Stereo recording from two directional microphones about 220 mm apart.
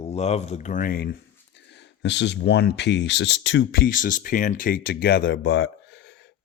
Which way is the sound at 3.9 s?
40° left (ahead or behind).